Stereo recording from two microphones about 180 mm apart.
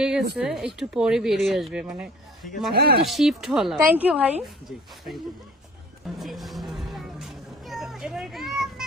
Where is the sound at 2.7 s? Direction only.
60° right (ahead or behind).